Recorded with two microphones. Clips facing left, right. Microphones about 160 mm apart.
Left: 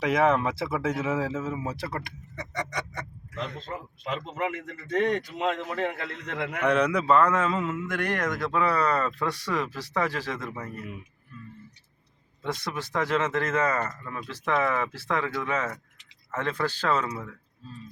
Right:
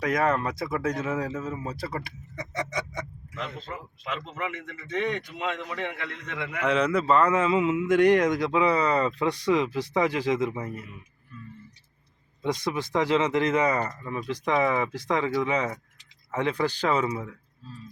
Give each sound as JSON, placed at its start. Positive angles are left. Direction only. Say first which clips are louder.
{"t": 0.1, "sound": "speech", "louder": "left 3 dB", "side_deg": 5}
{"t": 2.3, "sound": "speech", "louder": "right 2 dB", "side_deg": -10}
{"t": 4.1, "sound": "a man's voice", "louder": "left 3 dB", "side_deg": 40}
{"t": 6.6, "sound": "a man's voice", "louder": "even", "side_deg": -5}
{"t": 12.4, "sound": "a man's voice", "louder": "right 4 dB", "side_deg": -15}